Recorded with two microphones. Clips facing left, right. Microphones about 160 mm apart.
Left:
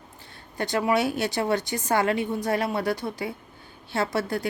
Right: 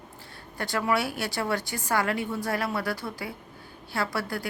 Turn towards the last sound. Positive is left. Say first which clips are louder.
# left 4 dB
turn(degrees=20)  # may be behind; listen again after turning